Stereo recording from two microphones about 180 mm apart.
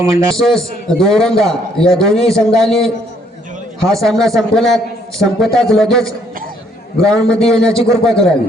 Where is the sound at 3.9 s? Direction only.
Centre (ahead or behind).